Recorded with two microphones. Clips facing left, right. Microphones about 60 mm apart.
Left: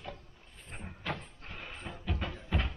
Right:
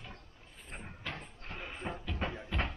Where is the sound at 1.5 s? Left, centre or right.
Centre.